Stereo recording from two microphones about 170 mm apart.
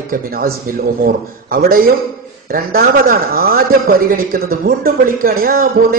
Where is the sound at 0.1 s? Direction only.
55° right (ahead or behind).